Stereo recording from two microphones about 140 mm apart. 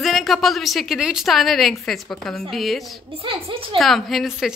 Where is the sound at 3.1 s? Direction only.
40° right (ahead or behind).